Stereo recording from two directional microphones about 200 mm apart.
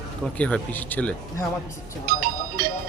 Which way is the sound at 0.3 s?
5° left (ahead or behind).